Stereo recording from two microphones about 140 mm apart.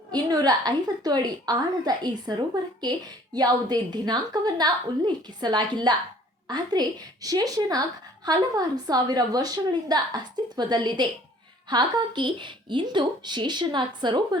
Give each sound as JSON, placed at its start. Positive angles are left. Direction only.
{"t": 0.1, "sound": "a woman's voice", "side_deg": -30}